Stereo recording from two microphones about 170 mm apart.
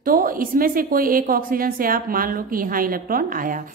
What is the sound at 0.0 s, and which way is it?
A woman's voice, 55° right (ahead or behind).